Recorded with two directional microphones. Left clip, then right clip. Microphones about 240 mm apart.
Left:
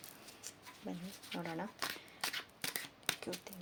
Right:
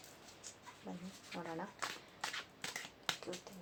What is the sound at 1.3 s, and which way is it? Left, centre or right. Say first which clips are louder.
Shuffling cards: left 2 dB; left.